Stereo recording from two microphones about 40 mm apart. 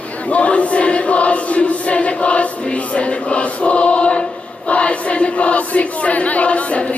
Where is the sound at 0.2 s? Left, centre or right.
Left.